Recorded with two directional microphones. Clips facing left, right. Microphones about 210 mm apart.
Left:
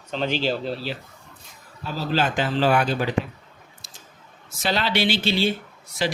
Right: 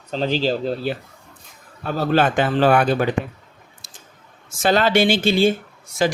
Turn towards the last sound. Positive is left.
turn(degrees=-45)  # may be behind; listen again after turning